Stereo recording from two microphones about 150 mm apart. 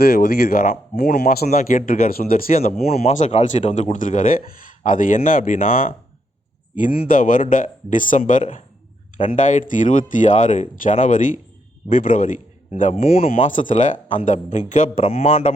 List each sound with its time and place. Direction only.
0.0 s a man's voice: 90° left
1.5 s speech: 55° left (ahead or behind)
2.8 s speech: 45° left (ahead or behind)
3.9 s speech: 60° left (ahead or behind)
13.0 s speech: 40° left (ahead or behind)
13.5 s speech: 60° left (ahead or behind)
14.9 s speech: 40° left (ahead or behind)